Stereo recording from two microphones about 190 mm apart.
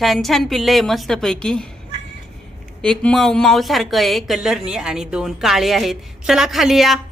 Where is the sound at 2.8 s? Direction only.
5° left (ahead or behind).